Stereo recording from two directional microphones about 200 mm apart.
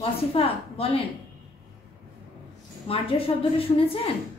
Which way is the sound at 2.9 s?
30° left (ahead or behind).